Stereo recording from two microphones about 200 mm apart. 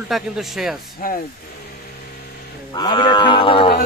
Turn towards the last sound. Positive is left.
turn(degrees=25)  # may be behind; listen again after turning